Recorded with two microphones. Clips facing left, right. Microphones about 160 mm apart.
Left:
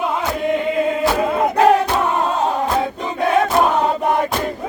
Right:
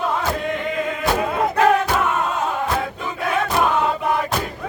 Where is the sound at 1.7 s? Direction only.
30° left (ahead or behind).